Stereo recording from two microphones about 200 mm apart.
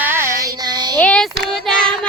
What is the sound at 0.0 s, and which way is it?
Child singing, 10° right (ahead or behind).